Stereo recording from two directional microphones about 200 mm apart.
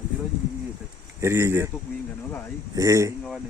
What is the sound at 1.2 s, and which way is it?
Speech, 10° right (ahead or behind).